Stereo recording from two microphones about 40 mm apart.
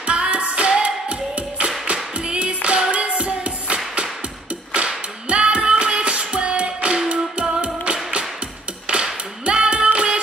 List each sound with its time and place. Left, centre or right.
0.0 s music: right
4.7 s clapping: right
7.1 s music: right
8.8 s a sound: right
9.9 s music: right